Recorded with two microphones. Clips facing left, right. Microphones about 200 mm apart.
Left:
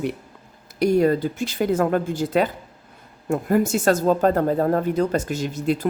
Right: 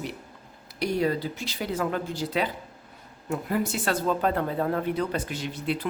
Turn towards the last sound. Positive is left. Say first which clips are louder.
# left 7 dB
turn(degrees=45)  # may be behind; listen again after turning